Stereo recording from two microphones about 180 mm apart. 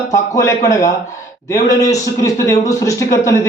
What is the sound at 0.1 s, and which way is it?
A man's voice, 15° left (ahead or behind).